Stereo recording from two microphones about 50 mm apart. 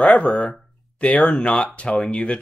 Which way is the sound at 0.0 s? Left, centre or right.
Left.